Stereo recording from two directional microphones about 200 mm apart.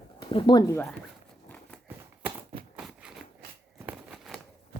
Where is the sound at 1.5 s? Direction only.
5° left (ahead or behind).